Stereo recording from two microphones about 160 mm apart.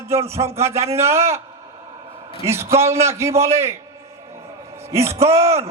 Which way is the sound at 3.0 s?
15° right (ahead or behind).